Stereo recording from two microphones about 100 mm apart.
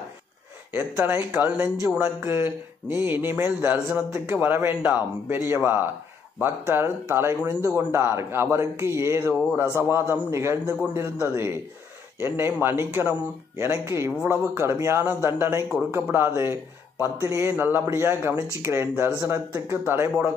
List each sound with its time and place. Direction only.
0.9 s speech: 15° right (ahead or behind)